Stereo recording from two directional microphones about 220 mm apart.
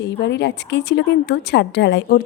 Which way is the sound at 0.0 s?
50° left (ahead or behind).